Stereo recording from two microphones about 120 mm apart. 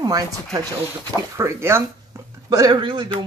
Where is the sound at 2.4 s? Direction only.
35° right (ahead or behind).